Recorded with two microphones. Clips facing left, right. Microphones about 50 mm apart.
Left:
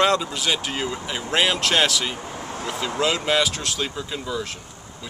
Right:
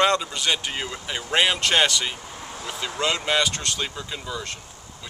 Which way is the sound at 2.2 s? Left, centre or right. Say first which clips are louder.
Left 5 dB; left.